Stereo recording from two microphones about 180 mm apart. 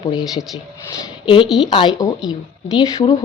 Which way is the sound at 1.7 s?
25° left (ahead or behind).